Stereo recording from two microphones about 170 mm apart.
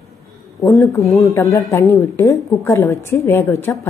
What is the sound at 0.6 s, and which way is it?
A woman's voice, 15° left (ahead or behind).